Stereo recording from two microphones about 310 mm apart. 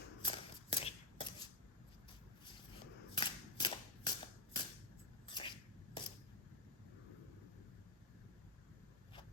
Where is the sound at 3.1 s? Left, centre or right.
Centre.